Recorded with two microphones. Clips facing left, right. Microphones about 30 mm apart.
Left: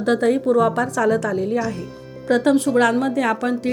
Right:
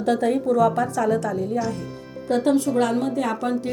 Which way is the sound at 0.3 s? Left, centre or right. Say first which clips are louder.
Left 2 dB; left.